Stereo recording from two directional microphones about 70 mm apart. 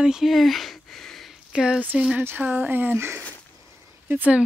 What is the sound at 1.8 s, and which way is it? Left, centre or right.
Speech, right.